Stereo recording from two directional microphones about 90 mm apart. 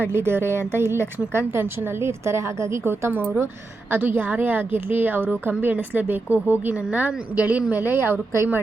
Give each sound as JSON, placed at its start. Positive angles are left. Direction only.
{"t": 0.1, "sound": "a woman's voice", "side_deg": -25}